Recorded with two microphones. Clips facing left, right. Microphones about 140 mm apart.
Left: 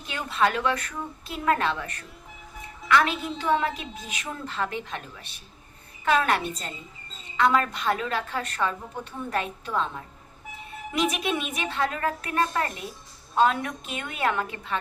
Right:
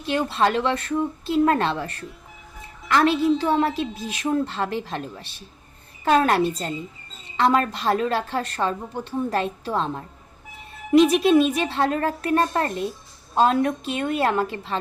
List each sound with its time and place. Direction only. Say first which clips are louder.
0.1 s a woman's voice: right 4 dB; 30° right (ahead or behind)